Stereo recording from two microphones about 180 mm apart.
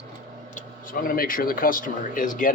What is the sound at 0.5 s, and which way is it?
Speech, 50° left (ahead or behind).